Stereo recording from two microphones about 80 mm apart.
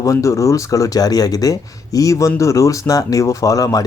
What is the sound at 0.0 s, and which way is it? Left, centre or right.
Speech, left.